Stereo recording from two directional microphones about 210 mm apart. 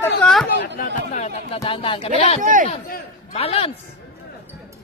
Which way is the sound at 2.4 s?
40° right (ahead or behind).